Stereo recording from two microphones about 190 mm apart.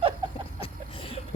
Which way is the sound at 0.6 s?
30° left (ahead or behind).